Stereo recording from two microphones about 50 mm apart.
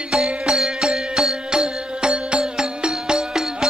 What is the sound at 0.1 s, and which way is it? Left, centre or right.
Music, centre.